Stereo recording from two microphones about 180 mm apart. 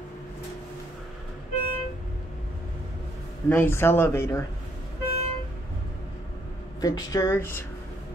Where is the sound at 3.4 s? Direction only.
10° left (ahead or behind).